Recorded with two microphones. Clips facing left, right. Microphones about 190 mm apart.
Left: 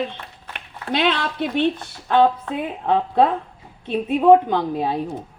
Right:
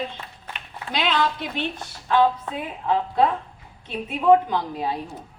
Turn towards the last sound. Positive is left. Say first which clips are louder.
# left 4 dB
turn(degrees=55)  # may be behind; listen again after turning